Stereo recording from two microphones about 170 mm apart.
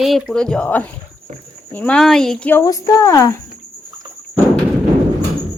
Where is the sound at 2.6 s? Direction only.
20° left (ahead or behind).